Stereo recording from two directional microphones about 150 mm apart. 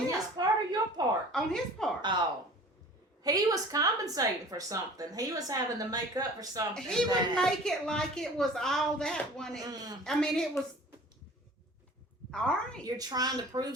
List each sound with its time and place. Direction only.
0.3 s a sound: 25° right (ahead or behind)
1.3 s a woman's voice: 5° left (ahead or behind)
2.0 s speech: 30° right (ahead or behind)
3.2 s speech: 25° right (ahead or behind)
6.7 s a woman's voice: 5° left (ahead or behind)
9.6 s speech: 25° right (ahead or behind)
10.0 s a woman's voice: 5° left (ahead or behind)
12.3 s a woman's voice: 5° left (ahead or behind)
12.8 s speech: 25° right (ahead or behind)